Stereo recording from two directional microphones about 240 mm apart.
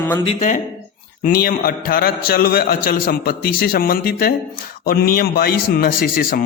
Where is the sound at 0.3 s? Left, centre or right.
Left.